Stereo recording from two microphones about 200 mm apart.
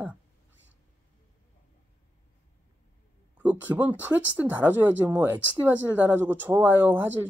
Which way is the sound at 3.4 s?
10° right (ahead or behind).